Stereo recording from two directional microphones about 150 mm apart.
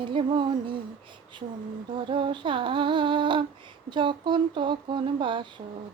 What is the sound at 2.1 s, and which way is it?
Music, 35° right (ahead or behind).